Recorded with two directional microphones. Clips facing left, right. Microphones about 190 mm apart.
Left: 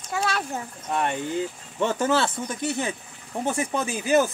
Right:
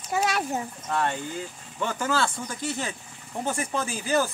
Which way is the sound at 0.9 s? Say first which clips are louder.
Left 3 dB; 20° left (ahead or behind).